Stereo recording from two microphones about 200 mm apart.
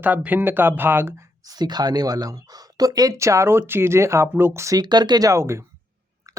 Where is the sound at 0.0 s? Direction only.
10° right (ahead or behind).